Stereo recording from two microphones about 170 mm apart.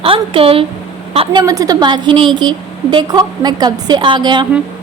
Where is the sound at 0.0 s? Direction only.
30° right (ahead or behind).